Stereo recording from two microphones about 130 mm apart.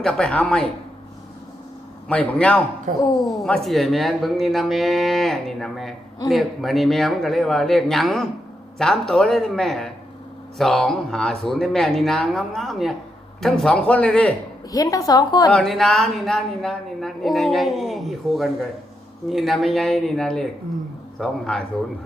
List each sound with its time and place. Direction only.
0.0 s speech: 5° left (ahead or behind)
2.0 s a man's voice: 10° left (ahead or behind)
2.9 s a woman's voice: 85° right
3.2 s a man's voice: 5° left (ahead or behind)
14.7 s a woman's voice: 25° left (ahead or behind)
15.5 s speech: 5° left (ahead or behind)